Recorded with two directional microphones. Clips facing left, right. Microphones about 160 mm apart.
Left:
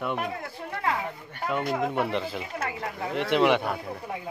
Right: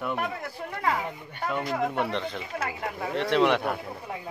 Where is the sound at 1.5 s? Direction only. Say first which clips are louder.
Left 1 dB; centre (ahead or behind).